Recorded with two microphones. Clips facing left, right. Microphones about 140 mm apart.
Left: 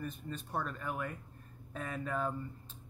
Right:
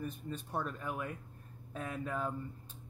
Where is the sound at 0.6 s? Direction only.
10° right (ahead or behind).